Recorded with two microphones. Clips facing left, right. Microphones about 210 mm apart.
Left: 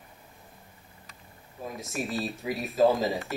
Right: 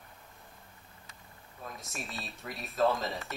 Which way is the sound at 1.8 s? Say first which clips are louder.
Left 13 dB; centre (ahead or behind).